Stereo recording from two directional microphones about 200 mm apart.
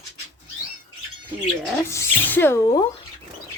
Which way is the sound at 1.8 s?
10° left (ahead or behind).